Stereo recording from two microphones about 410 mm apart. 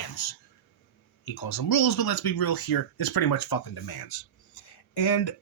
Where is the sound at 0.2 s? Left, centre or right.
Left.